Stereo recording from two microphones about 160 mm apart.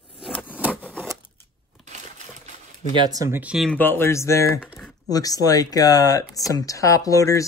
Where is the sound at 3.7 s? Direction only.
10° left (ahead or behind).